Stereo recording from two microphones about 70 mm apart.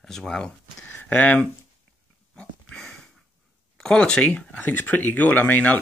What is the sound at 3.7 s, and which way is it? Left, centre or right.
Speech, centre.